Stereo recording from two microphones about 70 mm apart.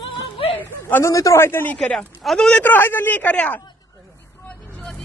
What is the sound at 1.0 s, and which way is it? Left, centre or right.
Speech, left.